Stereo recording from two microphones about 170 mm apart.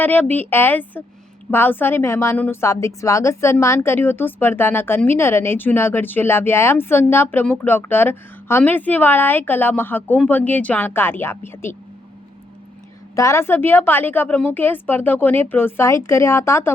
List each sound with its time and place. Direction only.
0.0 s a woman's voice: 10° left (ahead or behind)
13.1 s a woman's voice: 15° left (ahead or behind)